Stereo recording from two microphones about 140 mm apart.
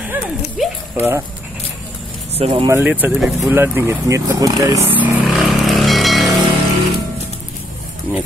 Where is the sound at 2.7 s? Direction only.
15° right (ahead or behind).